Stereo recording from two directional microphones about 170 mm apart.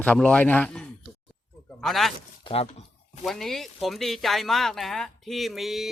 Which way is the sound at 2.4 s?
35° left (ahead or behind).